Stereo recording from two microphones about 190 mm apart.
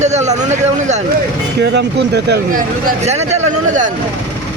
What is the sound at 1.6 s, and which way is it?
Speech, 65° right (ahead or behind).